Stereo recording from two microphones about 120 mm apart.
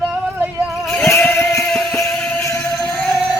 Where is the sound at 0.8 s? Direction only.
5° left (ahead or behind).